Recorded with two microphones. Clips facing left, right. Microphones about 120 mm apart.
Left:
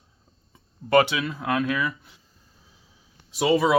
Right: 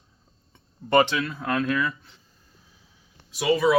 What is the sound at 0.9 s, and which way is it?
Speech, 5° left (ahead or behind).